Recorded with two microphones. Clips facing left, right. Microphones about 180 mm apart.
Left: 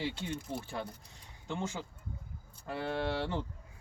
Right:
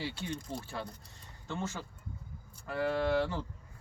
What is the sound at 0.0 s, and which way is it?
Speech, 20° left (ahead or behind).